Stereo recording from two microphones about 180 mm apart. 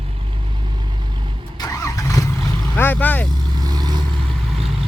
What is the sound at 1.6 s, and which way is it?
Vehicle, 20° left (ahead or behind).